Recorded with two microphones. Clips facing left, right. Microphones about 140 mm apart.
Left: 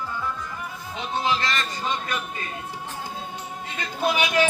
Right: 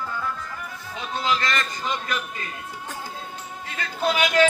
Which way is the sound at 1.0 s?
25° left (ahead or behind).